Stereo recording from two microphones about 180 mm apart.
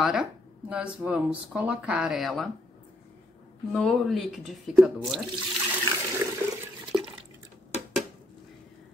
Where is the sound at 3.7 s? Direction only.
Centre (ahead or behind).